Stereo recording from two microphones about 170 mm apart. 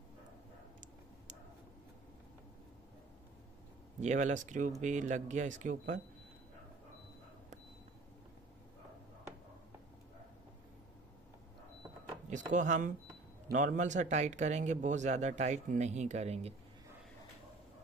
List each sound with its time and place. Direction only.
4.0 s speech: 45° right (ahead or behind)
12.3 s speech: 45° right (ahead or behind)